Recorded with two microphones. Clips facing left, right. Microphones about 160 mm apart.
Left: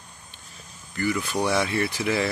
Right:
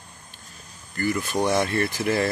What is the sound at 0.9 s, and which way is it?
Speech, 45° right (ahead or behind).